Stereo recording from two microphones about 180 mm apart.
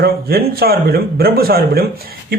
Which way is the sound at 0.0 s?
55° right (ahead or behind).